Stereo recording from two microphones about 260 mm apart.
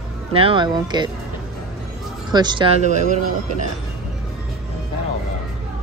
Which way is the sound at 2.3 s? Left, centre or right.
Centre.